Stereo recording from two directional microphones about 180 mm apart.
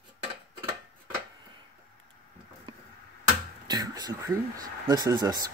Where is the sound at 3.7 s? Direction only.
20° right (ahead or behind).